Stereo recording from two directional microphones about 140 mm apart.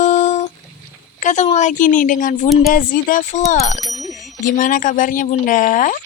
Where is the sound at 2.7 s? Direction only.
80° left; by 3.8 s 50° left (ahead or behind).